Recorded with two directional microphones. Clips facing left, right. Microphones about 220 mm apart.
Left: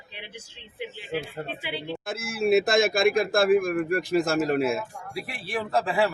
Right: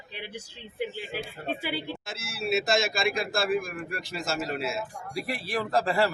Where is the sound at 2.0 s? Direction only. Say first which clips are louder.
Left 8 dB; 55° left (ahead or behind).